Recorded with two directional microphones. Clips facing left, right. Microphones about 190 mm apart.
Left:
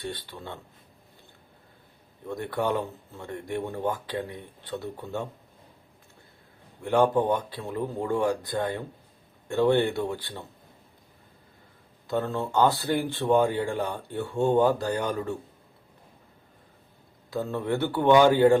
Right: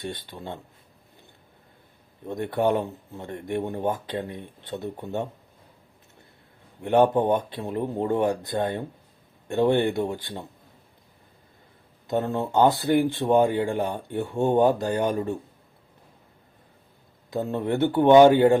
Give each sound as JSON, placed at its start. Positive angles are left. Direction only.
{"t": 0.0, "sound": "speech", "side_deg": -20}
{"t": 2.2, "sound": "speech", "side_deg": -20}
{"t": 6.8, "sound": "speech", "side_deg": -20}
{"t": 12.0, "sound": "speech", "side_deg": -20}
{"t": 17.3, "sound": "speech", "side_deg": -20}